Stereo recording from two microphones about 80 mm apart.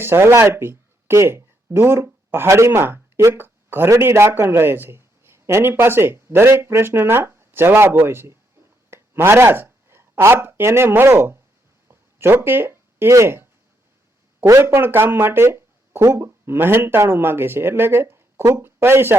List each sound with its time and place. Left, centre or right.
0.0 s speech: right
11.9 s a sound: right
14.4 s speech: right
14.7 s speech: right